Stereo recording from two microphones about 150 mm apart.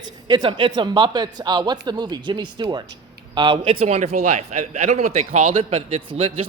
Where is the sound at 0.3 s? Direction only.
30° right (ahead or behind).